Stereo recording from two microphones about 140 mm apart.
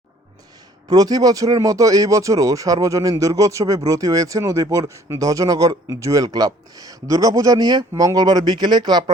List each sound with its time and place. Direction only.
0.9 s speech: 25° right (ahead or behind)